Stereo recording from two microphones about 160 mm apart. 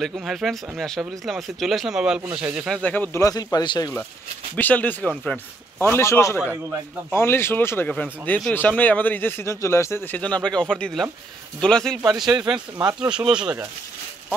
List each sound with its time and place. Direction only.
0.0 s speech: centre (ahead or behind)
2.8 s speech: 10° left (ahead or behind)
4.6 s speech: 10° left (ahead or behind)
6.4 s a man's voice: 15° right (ahead or behind)
7.2 s speech: 15° left (ahead or behind)
12.5 s speech: 25° right (ahead or behind)
13.1 s speech: 5° right (ahead or behind)